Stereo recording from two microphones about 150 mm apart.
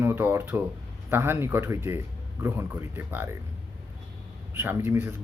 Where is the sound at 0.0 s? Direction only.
15° right (ahead or behind).